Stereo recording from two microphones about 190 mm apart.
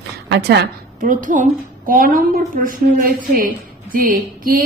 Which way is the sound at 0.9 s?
45° right (ahead or behind).